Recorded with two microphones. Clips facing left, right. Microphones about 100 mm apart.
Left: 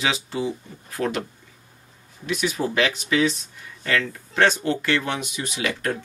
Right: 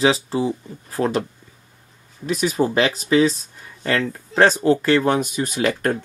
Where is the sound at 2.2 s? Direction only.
35° right (ahead or behind).